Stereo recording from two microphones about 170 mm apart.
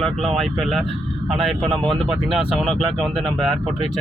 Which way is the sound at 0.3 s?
Centre (ahead or behind).